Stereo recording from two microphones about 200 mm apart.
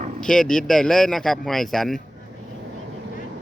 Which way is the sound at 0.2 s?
5° left (ahead or behind).